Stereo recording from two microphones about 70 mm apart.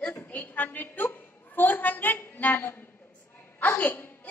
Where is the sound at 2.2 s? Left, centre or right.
Left.